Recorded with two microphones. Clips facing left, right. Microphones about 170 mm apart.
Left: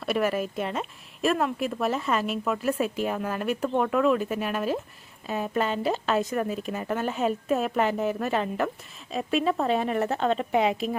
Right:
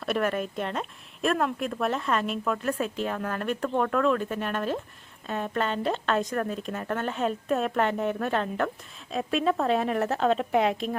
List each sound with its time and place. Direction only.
0.0 s a woman's voice: 5° left (ahead or behind)